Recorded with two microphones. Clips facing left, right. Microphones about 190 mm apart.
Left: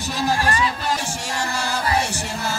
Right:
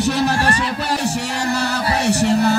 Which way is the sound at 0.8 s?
65° right (ahead or behind).